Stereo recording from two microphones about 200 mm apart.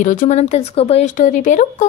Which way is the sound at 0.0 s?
40° left (ahead or behind).